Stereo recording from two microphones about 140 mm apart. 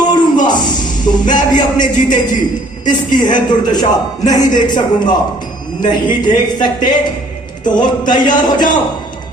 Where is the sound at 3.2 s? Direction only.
30° left (ahead or behind).